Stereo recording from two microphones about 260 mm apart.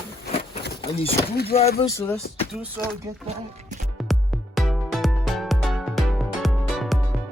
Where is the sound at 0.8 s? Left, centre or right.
Left.